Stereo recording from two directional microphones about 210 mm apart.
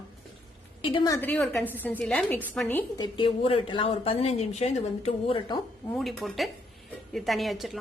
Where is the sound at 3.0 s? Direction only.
25° left (ahead or behind).